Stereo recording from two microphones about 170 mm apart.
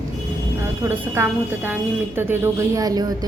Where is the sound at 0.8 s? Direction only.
10° right (ahead or behind).